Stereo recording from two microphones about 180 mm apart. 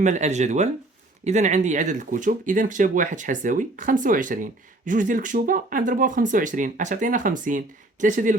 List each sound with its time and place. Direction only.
0.0 s speech: 40° right (ahead or behind)